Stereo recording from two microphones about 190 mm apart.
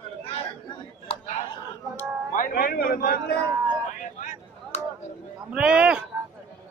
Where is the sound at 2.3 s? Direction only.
50° left (ahead or behind).